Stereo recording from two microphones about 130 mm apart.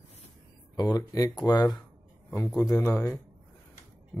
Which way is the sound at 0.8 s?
30° left (ahead or behind).